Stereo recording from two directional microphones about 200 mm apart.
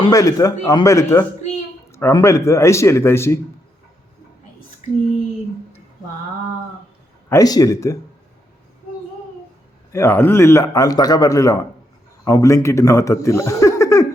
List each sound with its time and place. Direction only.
0.0 s a man's voice: 15° left (ahead or behind)
7.3 s a man's voice: 15° left (ahead or behind)
9.9 s a man's voice: 10° left (ahead or behind)